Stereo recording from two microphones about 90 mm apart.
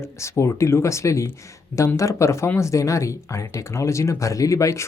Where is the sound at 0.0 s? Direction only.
30° left (ahead or behind).